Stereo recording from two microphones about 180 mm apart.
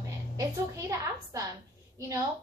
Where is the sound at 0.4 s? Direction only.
15° right (ahead or behind).